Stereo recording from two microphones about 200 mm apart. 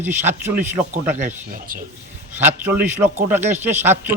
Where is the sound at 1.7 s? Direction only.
45° right (ahead or behind).